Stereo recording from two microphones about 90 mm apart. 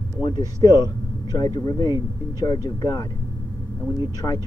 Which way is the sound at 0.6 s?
45° left (ahead or behind).